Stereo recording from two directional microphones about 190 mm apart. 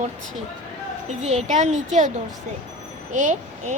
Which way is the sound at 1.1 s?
35° right (ahead or behind).